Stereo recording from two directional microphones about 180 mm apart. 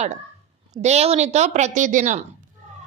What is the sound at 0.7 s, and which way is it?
A woman's voice, 40° right (ahead or behind).